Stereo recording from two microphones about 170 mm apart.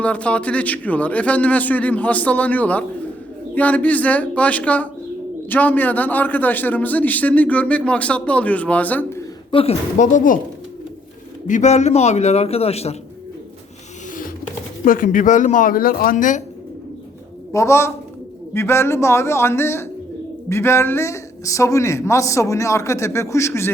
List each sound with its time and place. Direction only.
0.0 s a man's voice: 10° left (ahead or behind)
9.5 s a woman's voice: 30° left (ahead or behind)
10.0 s speech: 50° left (ahead or behind)
11.4 s a man's voice: 45° left (ahead or behind)
14.8 s speech: 55° left (ahead or behind)
17.5 s a man's voice: 15° left (ahead or behind)